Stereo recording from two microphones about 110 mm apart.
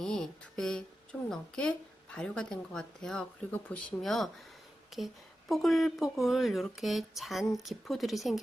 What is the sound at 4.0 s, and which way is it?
A woman's voice, centre (ahead or behind).